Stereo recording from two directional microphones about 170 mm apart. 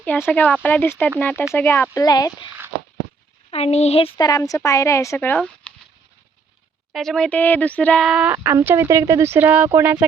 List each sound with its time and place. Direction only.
0.0 s speech: 10° left (ahead or behind)
3.5 s speech: 40° left (ahead or behind)
4.3 s speech: 20° left (ahead or behind)
6.9 s speech: centre (ahead or behind); by 10.0 s 15° right (ahead or behind)